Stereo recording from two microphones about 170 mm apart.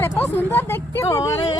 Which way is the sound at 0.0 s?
10° left (ahead or behind).